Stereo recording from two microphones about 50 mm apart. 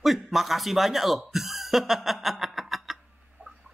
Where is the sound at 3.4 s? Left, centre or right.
Right.